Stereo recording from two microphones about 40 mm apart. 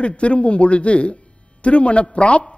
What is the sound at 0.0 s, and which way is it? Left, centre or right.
A man's voice, left.